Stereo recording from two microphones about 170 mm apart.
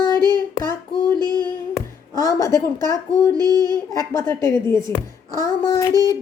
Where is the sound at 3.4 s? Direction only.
25° right (ahead or behind).